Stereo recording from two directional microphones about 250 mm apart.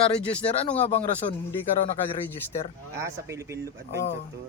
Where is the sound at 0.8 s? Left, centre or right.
Left.